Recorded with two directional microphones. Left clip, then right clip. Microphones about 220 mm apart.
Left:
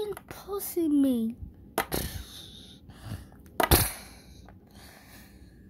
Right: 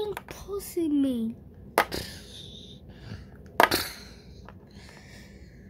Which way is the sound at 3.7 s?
25° left (ahead or behind).